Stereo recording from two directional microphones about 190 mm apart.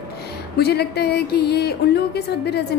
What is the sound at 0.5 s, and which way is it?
A woman's voice, 60° left (ahead or behind).